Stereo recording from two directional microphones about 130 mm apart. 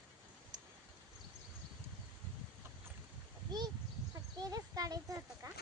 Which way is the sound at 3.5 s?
30° right (ahead or behind).